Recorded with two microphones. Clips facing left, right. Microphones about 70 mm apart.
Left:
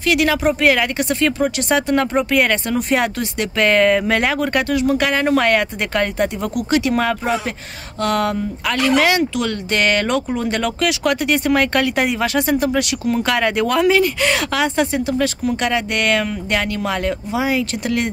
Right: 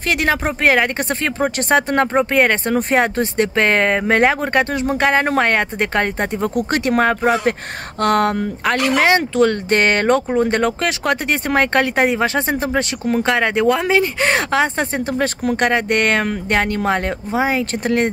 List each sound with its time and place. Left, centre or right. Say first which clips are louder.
0.0 s speech: left 2 dB; right
8.9 s speech: right 1 dB; right